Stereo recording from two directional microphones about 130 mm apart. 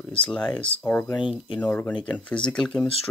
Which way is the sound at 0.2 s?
10° left (ahead or behind).